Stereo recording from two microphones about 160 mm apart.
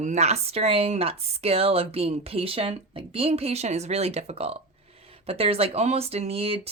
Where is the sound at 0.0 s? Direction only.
45° right (ahead or behind).